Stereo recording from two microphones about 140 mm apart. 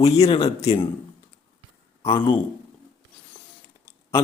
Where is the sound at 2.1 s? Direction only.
30° left (ahead or behind).